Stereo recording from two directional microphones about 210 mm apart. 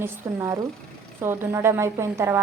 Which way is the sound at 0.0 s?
15° right (ahead or behind).